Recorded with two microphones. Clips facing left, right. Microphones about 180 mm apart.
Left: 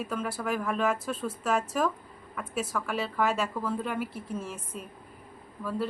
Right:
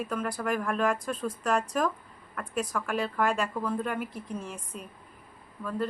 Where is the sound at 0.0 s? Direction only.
5° left (ahead or behind).